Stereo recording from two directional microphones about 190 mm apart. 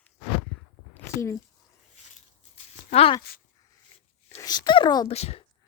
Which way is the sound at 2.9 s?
30° left (ahead or behind).